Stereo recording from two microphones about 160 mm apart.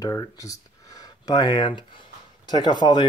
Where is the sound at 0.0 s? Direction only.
20° left (ahead or behind).